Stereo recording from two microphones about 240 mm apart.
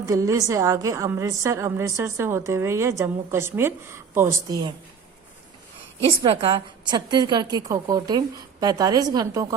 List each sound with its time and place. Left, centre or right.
0.0 s a woman's voice: centre
6.2 s a woman's voice: right